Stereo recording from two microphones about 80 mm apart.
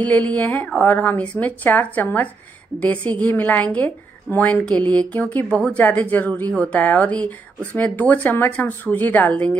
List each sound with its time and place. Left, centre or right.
0.0 s a woman's voice: centre